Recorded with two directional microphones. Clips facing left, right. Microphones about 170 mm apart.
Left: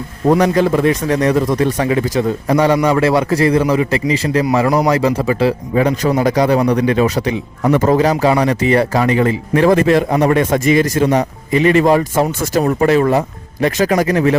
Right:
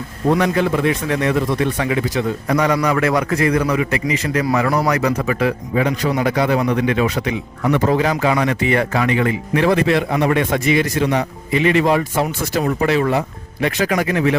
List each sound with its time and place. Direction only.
0.3 s speech: 40° left (ahead or behind)